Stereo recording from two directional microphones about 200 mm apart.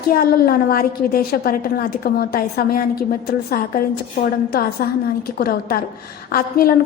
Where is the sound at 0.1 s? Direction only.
45° left (ahead or behind).